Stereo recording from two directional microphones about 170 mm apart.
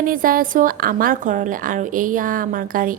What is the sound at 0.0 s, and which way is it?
A woman's voice, 55° right (ahead or behind).